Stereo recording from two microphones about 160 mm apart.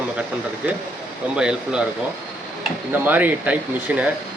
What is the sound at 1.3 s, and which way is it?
Speech, 5° right (ahead or behind).